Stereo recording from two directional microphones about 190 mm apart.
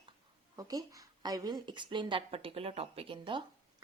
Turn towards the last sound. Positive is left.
turn(degrees=-25)  # may be behind; listen again after turning